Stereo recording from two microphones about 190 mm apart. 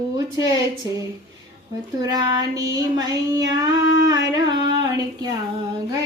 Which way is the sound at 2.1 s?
20° right (ahead or behind).